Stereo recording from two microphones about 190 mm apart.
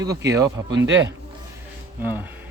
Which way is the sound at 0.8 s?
75° right (ahead or behind).